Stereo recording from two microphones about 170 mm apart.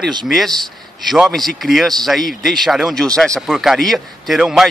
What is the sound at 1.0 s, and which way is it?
A man's voice, centre (ahead or behind).